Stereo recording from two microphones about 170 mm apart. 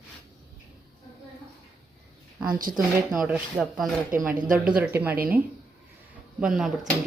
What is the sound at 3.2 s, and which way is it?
A woman's voice, 5° right (ahead or behind).